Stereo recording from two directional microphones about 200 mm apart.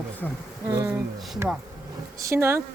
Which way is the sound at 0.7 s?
15° right (ahead or behind).